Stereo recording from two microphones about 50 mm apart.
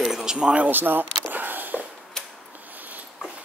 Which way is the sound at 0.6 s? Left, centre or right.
Right.